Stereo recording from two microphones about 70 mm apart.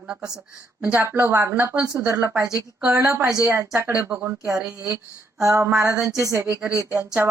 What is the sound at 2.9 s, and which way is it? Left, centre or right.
Speech, right.